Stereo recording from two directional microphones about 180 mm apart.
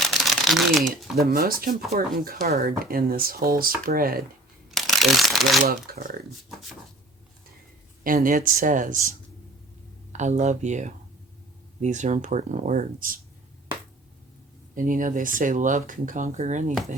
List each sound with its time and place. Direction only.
0.0 s shuffling cards: centre (ahead or behind)
1.1 s speech: 55° right (ahead or behind)
4.7 s shuffling cards: centre (ahead or behind)
5.6 s speech: 55° right (ahead or behind)
8.0 s speech: 50° right (ahead or behind)
14.8 s speech: 50° right (ahead or behind)